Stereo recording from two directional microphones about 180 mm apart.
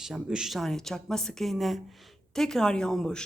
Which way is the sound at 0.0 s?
5° right (ahead or behind).